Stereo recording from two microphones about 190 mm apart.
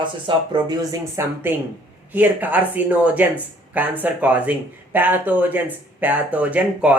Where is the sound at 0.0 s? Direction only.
25° right (ahead or behind).